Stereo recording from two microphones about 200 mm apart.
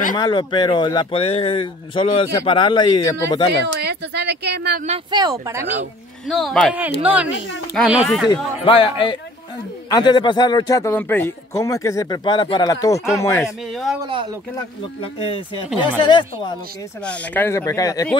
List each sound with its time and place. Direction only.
0.1 s speech: 20° left (ahead or behind)
3.6 s speech: 55° right (ahead or behind)
5.1 s speech: 15° right (ahead or behind)
6.2 s speech: centre (ahead or behind)
8.5 s a man's voice: 25° left (ahead or behind)
14.0 s speech: 25° right (ahead or behind)
14.5 s speech: 20° left (ahead or behind)
17.0 s a man's voice: 5° left (ahead or behind)